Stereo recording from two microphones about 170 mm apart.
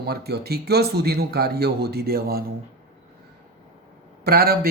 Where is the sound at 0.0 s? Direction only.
70° right (ahead or behind).